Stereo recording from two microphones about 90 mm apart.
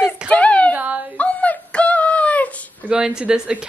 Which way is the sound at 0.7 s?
15° right (ahead or behind).